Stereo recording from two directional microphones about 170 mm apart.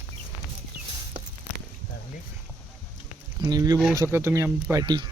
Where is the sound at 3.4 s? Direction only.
20° right (ahead or behind).